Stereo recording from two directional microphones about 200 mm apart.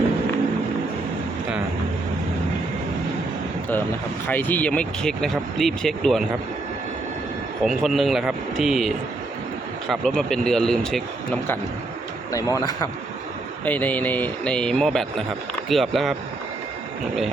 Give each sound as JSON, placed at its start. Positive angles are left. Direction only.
{"t": 4.3, "sound": "a man's voice", "side_deg": 10}
{"t": 7.6, "sound": "a man's voice", "side_deg": 0}
{"t": 9.9, "sound": "a man's voice", "side_deg": 0}
{"t": 12.3, "sound": "a man's voice", "side_deg": 15}